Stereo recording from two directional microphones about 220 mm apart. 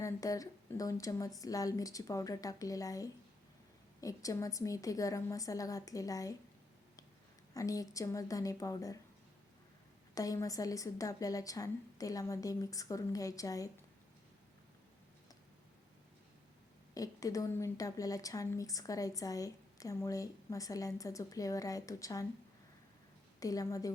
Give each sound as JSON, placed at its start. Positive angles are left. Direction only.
{"t": 0.0, "sound": "a woman's voice", "side_deg": 15}
{"t": 7.5, "sound": "a woman's voice", "side_deg": 15}
{"t": 10.2, "sound": "a woman's voice", "side_deg": 15}
{"t": 16.9, "sound": "a woman's voice", "side_deg": 15}
{"t": 23.4, "sound": "a woman's voice", "side_deg": 15}